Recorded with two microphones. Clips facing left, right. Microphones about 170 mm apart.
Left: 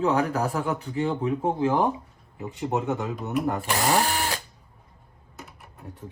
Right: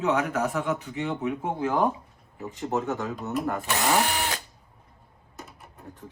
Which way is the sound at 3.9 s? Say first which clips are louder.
Left 1 dB; 40° left (ahead or behind).